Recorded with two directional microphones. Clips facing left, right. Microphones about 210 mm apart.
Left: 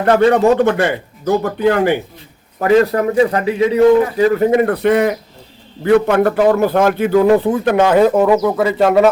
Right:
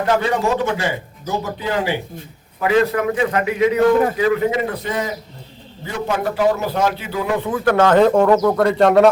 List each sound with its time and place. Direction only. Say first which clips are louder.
0.0 s speech: left 7 dB; 60° left (ahead or behind)
2.6 s a man's voice: left 4 dB; 40° left (ahead or behind)
4.5 s a man's voice: left 9 dB; 60° left (ahead or behind)
7.4 s speech: left 5 dB; 25° left (ahead or behind)
7.7 s speech: left 1 dB; 15° left (ahead or behind)